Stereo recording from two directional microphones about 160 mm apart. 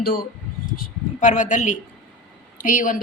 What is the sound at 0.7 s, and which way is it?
Speech, 60° left (ahead or behind).